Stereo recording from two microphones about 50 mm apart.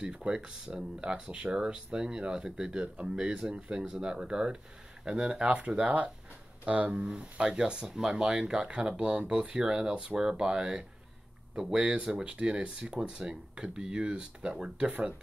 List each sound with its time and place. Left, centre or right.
0.0 s speech: centre